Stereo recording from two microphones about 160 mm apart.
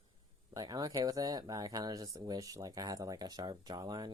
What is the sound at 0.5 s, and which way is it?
Speech, 25° right (ahead or behind).